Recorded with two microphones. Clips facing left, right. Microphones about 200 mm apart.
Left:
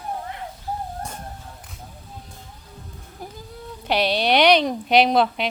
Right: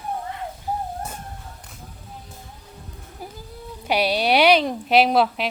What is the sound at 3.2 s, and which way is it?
Insect, 10° right (ahead or behind).